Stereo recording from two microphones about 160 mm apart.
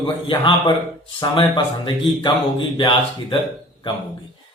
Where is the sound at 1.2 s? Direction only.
25° left (ahead or behind).